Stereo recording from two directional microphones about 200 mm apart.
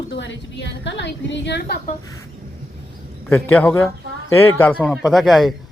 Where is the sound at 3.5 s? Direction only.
10° left (ahead or behind).